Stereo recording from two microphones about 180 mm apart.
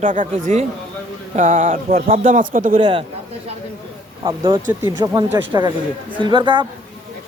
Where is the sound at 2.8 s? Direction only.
25° right (ahead or behind).